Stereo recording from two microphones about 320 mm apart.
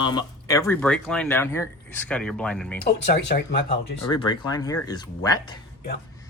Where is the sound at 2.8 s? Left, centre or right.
Left.